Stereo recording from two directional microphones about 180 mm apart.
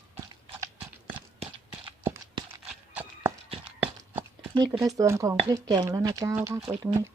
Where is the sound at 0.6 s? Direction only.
15° right (ahead or behind).